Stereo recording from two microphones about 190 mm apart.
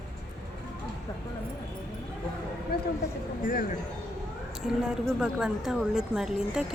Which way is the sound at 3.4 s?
45° left (ahead or behind).